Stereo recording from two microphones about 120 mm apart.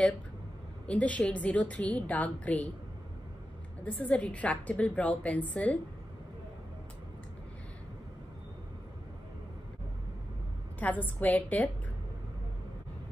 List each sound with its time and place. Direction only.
0.8 s a woman's voice: 10° left (ahead or behind)
3.8 s a woman's voice: 10° left (ahead or behind)
10.8 s a woman's voice: 15° left (ahead or behind)